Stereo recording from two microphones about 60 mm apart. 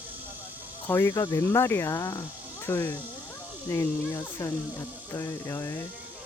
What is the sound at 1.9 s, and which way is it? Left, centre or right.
Speech, left.